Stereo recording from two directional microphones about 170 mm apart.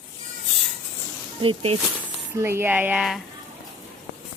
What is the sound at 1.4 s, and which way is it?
Speech, 30° right (ahead or behind).